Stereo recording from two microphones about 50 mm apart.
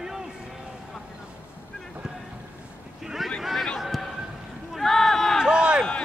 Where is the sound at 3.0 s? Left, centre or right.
Centre.